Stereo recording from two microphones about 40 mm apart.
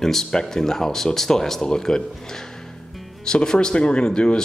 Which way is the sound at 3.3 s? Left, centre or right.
Left.